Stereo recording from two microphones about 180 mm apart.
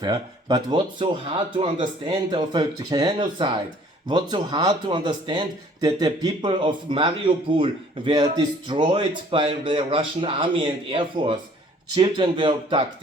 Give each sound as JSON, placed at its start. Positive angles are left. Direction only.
{"t": 0.0, "sound": "speech", "side_deg": -20}